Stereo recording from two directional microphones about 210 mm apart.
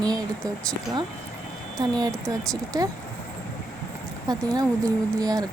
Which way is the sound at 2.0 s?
20° right (ahead or behind).